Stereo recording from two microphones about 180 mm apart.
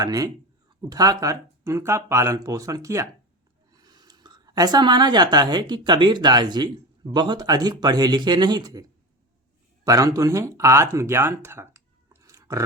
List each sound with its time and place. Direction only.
0.0 s speech: 20° right (ahead or behind)